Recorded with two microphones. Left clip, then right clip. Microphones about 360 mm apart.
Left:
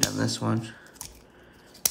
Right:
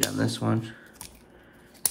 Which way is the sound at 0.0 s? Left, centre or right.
Centre.